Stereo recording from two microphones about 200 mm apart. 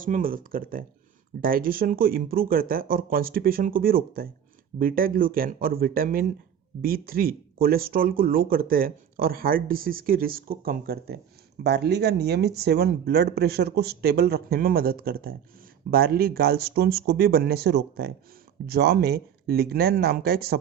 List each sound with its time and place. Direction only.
0.0 s speech: 45° right (ahead or behind)